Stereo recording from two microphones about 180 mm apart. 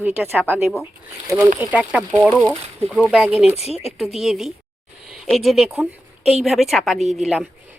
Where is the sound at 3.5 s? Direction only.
35° left (ahead or behind).